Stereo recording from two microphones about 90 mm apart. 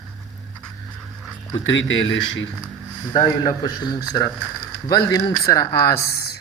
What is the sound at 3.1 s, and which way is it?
A man's voice, 55° left (ahead or behind).